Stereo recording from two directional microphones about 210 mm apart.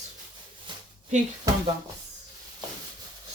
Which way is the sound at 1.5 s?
15° right (ahead or behind).